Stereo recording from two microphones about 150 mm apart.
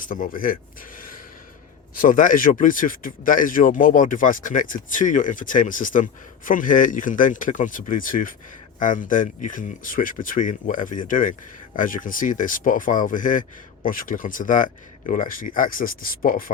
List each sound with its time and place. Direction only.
0.0 s speech: 65° left (ahead or behind)